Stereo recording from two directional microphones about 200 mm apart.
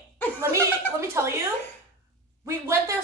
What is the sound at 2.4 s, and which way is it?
Speech, 15° right (ahead or behind).